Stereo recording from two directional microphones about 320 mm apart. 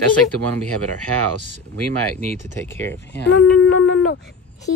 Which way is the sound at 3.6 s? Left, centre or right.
Left.